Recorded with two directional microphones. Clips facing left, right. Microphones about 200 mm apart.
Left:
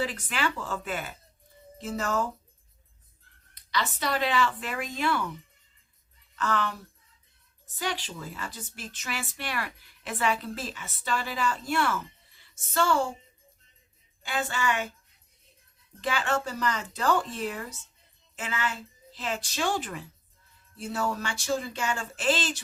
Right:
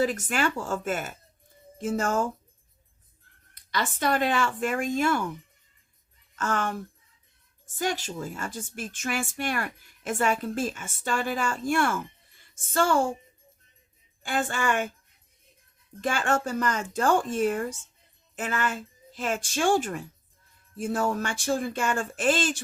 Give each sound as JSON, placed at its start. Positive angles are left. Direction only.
{"t": 0.0, "sound": "a woman's voice", "side_deg": -45}
{"t": 3.5, "sound": "a woman's voice", "side_deg": -50}
{"t": 6.3, "sound": "a woman's voice", "side_deg": -45}
{"t": 14.2, "sound": "a woman's voice", "side_deg": -50}
{"t": 16.0, "sound": "a woman's voice", "side_deg": -50}